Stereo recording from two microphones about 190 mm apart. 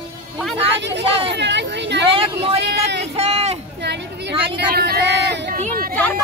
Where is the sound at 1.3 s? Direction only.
65° right (ahead or behind).